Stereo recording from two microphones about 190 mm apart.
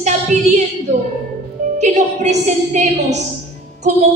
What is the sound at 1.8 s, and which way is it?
Speech, 40° right (ahead or behind).